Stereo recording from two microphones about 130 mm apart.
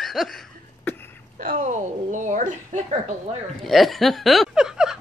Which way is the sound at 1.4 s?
85° right.